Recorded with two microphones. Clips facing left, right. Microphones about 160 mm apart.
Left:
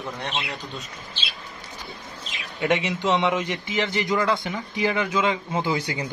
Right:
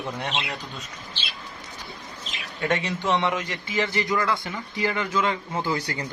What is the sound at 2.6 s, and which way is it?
A man's voice, 20° left (ahead or behind).